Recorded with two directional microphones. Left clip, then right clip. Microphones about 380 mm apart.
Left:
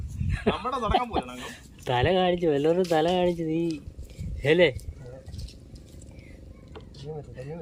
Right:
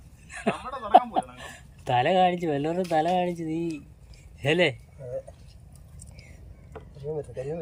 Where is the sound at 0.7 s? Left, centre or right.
Left.